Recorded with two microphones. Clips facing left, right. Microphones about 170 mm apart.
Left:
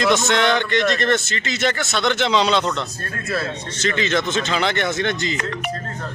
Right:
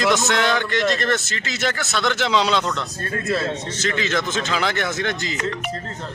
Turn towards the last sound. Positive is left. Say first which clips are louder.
# left 3 dB
turn(degrees=-5)  # may be behind; listen again after turning